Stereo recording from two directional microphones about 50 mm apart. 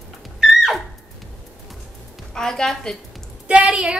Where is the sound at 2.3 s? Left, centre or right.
Centre.